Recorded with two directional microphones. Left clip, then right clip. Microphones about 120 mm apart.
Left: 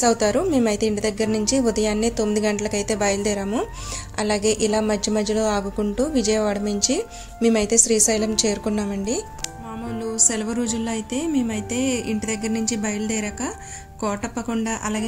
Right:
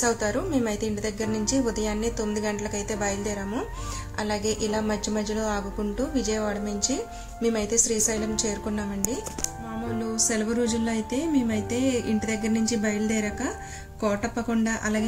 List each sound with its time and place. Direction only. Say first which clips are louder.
0.0 s a woman's voice: left 7 dB; 90° left
10.1 s a woman's voice: left 3 dB; 35° left (ahead or behind)
11.5 s speech: left 1 dB; 35° right (ahead or behind)
12.5 s a woman's voice: left 1 dB; 35° left (ahead or behind)